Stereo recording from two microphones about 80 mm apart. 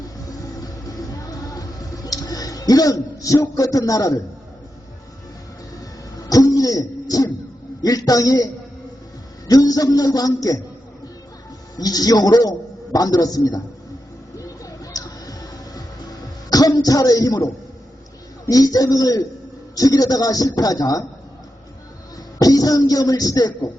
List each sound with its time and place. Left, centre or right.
0.3 s music: left
2.0 s a sound: left
3.5 s speech: left
6.2 s music: left
7.8 s speech: left
9.5 s speech: left
11.8 s a man's voice: left
14.3 s music: left
16.8 s speech: left
18.4 s speech: left
22.4 s speech: left